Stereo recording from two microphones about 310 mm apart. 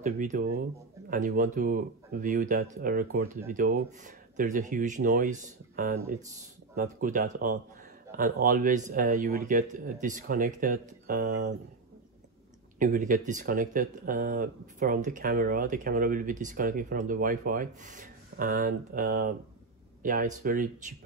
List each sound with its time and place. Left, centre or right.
0.0 s speech: right
12.7 s speech: right